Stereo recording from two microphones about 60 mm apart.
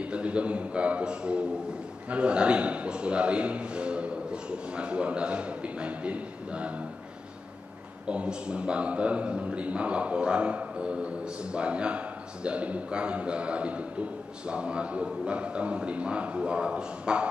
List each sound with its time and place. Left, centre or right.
0.0 s a man's voice: centre
8.1 s a man's voice: centre